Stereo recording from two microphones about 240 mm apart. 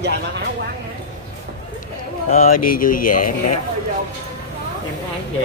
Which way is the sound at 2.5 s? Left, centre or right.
Left.